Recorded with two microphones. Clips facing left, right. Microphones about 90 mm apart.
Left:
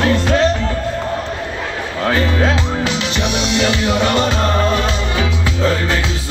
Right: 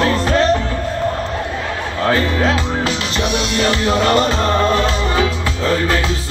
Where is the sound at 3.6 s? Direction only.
40° right (ahead or behind).